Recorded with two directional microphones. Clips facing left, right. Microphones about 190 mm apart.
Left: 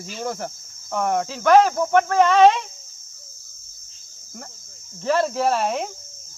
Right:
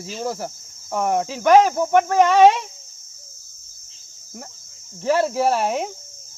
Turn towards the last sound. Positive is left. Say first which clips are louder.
# right 1 dB
turn(degrees=-10)  # may be behind; listen again after turning